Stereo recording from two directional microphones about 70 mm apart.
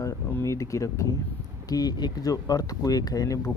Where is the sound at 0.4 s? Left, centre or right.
Left.